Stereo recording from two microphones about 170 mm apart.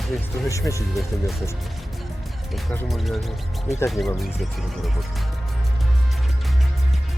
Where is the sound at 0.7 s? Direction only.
20° left (ahead or behind).